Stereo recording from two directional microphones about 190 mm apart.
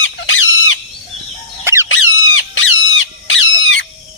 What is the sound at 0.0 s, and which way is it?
Fowl, 90° left.